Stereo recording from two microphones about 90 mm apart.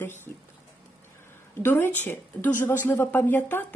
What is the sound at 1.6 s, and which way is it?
A woman's voice, 25° left (ahead or behind).